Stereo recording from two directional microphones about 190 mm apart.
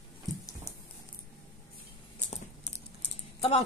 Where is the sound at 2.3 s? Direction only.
35° left (ahead or behind).